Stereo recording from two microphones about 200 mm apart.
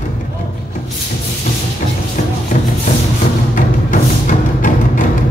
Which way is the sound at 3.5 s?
40° left (ahead or behind).